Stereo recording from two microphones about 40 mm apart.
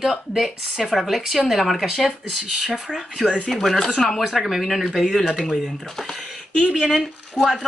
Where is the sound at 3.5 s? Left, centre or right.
Centre.